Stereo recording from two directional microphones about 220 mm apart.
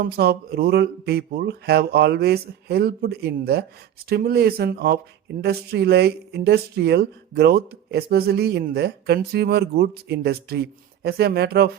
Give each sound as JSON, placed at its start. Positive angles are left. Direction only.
{"t": 0.0, "sound": "speech", "side_deg": -45}